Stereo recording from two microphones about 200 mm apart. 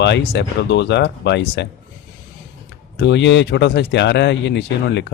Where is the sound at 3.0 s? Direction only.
60° left (ahead or behind).